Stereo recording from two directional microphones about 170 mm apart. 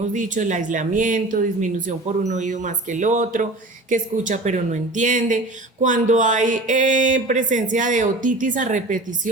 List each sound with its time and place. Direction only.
0.0 s speech: 50° right (ahead or behind)